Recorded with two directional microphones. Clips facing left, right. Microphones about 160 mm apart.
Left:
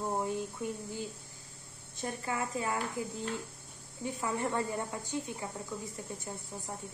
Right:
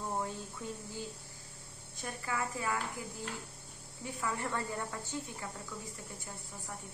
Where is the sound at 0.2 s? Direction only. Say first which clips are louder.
Left 5 dB; 20° left (ahead or behind).